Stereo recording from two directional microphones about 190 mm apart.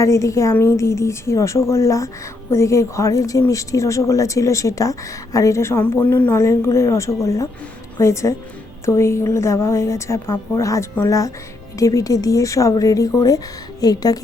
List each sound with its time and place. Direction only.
0.0 s a woman's voice: 15° left (ahead or behind)